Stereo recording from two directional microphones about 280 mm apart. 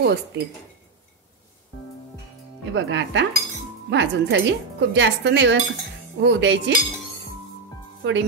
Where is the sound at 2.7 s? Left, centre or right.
Right.